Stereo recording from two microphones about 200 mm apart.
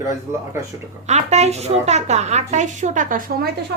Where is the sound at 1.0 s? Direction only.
35° right (ahead or behind).